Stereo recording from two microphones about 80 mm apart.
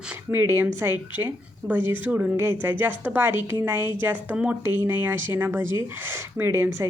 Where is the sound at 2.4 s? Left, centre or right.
Right.